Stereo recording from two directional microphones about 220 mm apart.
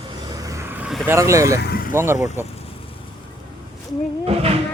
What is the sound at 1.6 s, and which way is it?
Vehicle, 40° left (ahead or behind).